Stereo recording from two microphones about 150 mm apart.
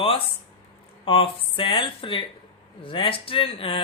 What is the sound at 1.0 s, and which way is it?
Speech, 35° left (ahead or behind).